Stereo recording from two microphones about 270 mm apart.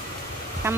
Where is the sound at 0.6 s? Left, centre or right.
Centre.